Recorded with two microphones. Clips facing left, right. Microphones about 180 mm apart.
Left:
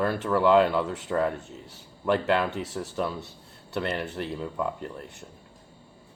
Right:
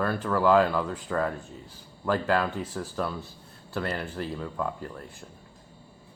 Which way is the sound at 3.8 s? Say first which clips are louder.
Left 1 dB; 20° left (ahead or behind).